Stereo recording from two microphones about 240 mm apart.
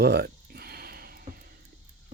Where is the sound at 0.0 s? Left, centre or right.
Right.